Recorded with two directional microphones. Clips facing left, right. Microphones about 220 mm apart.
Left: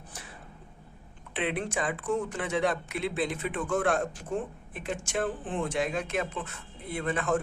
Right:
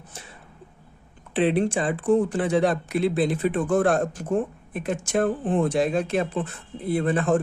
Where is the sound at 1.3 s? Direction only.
35° right (ahead or behind).